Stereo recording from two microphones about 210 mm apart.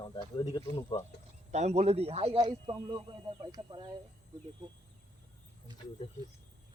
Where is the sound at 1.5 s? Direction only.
30° right (ahead or behind).